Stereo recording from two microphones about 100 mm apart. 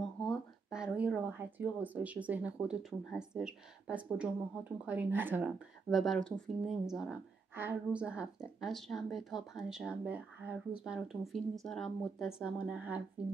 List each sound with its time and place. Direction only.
0.0 s a sound: 5° left (ahead or behind)
0.7 s speech: 10° right (ahead or behind)
5.9 s speech: centre (ahead or behind)
11.6 s speech: 5° left (ahead or behind)
12.3 s speech: 10° right (ahead or behind)